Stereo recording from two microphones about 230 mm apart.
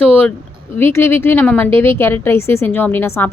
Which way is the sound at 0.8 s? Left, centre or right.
Centre.